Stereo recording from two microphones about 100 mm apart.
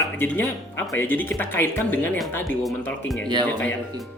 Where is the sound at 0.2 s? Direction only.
20° left (ahead or behind).